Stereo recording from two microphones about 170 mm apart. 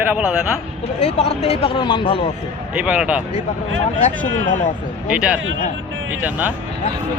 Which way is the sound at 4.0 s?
50° left (ahead or behind).